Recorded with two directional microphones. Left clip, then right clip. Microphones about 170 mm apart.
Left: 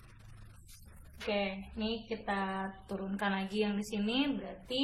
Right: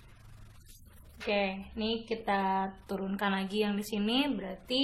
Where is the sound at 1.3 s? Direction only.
50° right (ahead or behind).